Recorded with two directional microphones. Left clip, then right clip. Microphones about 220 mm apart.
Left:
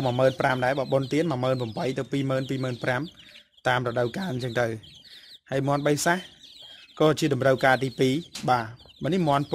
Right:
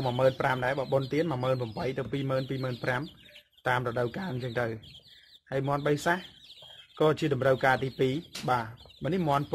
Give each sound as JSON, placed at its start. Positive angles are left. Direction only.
{"t": 0.0, "sound": "speech", "side_deg": 40}